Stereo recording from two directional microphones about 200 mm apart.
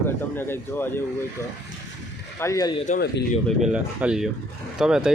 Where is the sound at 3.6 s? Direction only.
5° right (ahead or behind).